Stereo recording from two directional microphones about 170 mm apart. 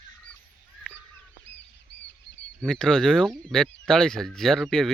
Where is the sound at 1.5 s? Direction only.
90° left.